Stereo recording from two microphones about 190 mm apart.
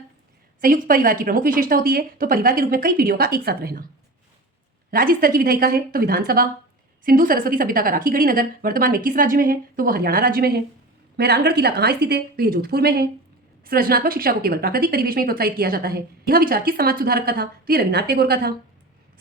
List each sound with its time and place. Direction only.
0.6 s a woman's voice: 50° right (ahead or behind)
4.9 s a woman's voice: 50° right (ahead or behind)